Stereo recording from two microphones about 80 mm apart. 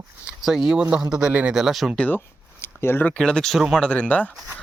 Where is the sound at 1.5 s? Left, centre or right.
Centre.